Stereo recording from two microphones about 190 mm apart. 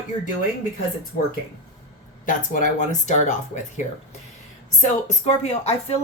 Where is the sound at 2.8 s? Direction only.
40° left (ahead or behind).